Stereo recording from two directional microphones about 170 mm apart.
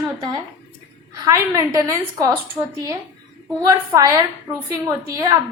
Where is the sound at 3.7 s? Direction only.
20° right (ahead or behind).